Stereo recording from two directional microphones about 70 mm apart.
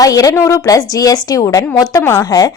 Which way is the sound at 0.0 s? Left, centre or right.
Left.